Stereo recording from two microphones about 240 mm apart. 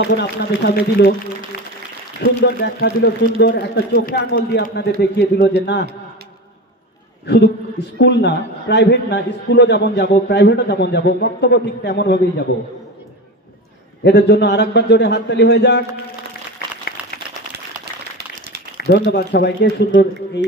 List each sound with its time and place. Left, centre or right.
0.0 s a man's voice: left
7.3 s a man's voice: left
14.0 s a man's voice: left
18.8 s a man's voice: left